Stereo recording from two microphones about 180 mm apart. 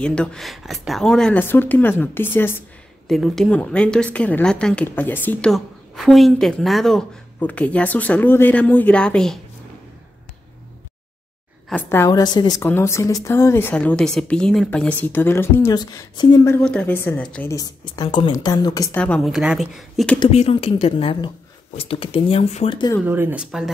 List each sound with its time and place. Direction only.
0.0 s a woman's voice: 5° left (ahead or behind)
3.1 s a woman's voice: centre (ahead or behind)
11.7 s a woman's voice: 15° left (ahead or behind)
16.5 s a woman's voice: 10° left (ahead or behind)
17.5 s a woman's voice: 20° left (ahead or behind)
18.9 s a woman's voice: 5° left (ahead or behind)
20.2 s speech: 35° left (ahead or behind)
23.0 s a woman's voice: 10° right (ahead or behind)